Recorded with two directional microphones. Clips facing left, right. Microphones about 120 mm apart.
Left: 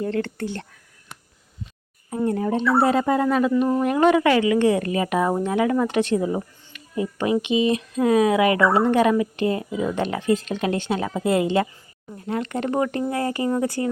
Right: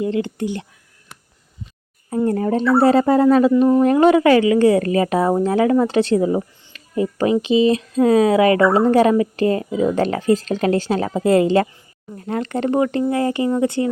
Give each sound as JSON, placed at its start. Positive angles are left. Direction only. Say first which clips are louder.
{"t": 0.0, "sound": "speech", "louder": "right 4 dB", "side_deg": -15}
{"t": 2.2, "sound": "a woman's voice", "louder": "right 3 dB", "side_deg": -40}
{"t": 6.7, "sound": "a sound", "louder": "right 6 dB", "side_deg": -35}
{"t": 7.4, "sound": "a woman's voice", "louder": "right 5 dB", "side_deg": -30}